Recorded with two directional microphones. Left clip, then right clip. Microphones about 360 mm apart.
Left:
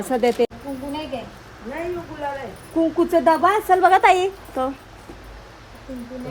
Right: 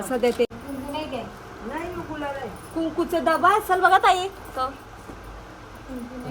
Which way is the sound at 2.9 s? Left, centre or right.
Left.